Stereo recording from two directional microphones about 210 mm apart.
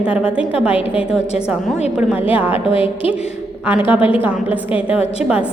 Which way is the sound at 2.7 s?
25° left (ahead or behind).